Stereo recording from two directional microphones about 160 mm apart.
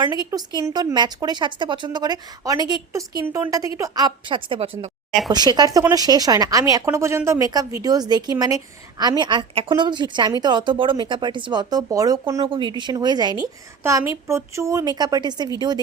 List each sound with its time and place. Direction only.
0.0 s a woman's voice: 25° right (ahead or behind)